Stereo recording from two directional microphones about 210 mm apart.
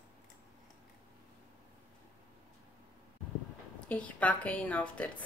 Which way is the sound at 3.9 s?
5° left (ahead or behind).